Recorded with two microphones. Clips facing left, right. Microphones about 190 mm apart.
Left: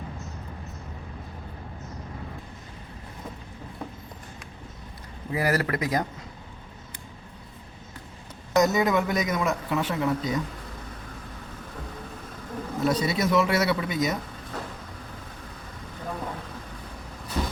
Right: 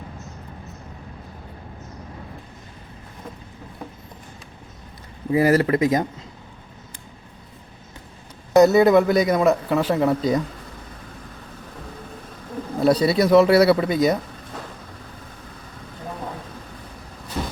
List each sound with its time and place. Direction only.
5.3 s speech: 25° right (ahead or behind)
8.5 s speech: 35° right (ahead or behind)
12.8 s speech: 35° right (ahead or behind)